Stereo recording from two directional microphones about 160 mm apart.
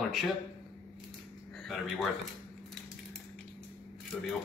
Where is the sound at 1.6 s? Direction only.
Centre (ahead or behind).